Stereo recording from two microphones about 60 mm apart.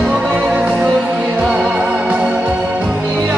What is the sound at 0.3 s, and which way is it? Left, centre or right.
Music, centre.